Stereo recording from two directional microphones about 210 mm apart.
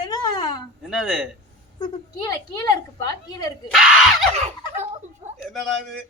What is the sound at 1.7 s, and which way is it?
A child's voice, 15° left (ahead or behind).